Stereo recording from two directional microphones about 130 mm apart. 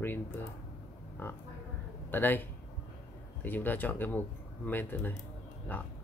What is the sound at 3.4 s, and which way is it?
A man's voice, 15° left (ahead or behind).